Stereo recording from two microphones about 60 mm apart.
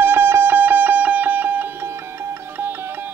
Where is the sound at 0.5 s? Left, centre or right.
Right.